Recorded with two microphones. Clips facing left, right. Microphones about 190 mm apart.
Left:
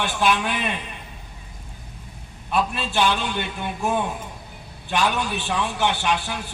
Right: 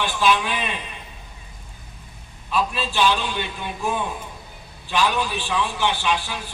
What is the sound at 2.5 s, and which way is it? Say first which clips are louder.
Speech: even; 50° left (ahead or behind).